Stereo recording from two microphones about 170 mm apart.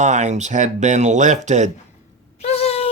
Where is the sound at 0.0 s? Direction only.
45° right (ahead or behind).